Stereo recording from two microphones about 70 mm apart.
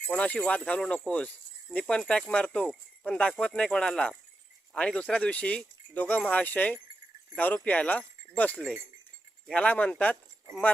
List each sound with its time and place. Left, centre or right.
0.1 s speech: centre